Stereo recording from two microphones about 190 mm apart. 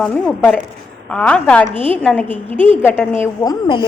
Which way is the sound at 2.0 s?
5° left (ahead or behind).